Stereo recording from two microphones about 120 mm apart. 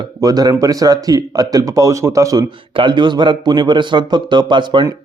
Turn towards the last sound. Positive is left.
turn(degrees=-40)  # may be behind; listen again after turning